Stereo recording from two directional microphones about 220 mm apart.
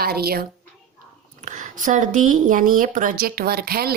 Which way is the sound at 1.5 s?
35° right (ahead or behind).